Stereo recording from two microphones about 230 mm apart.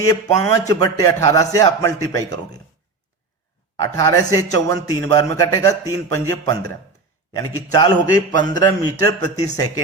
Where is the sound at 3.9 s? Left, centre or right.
Centre.